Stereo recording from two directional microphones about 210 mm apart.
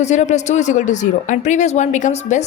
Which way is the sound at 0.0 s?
35° left (ahead or behind).